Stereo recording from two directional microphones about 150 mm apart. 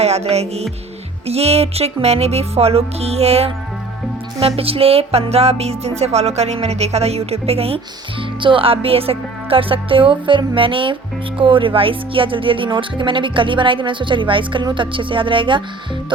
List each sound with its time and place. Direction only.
0.0 s music: 45° right (ahead or behind)
8.4 s speech: 35° right (ahead or behind)